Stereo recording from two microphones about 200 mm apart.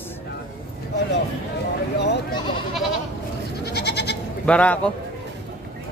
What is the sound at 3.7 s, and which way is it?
Goat, 55° left (ahead or behind).